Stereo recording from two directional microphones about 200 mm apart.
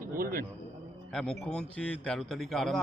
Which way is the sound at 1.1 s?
5° left (ahead or behind).